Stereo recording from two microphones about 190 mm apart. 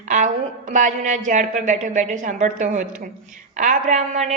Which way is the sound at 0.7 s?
40° right (ahead or behind).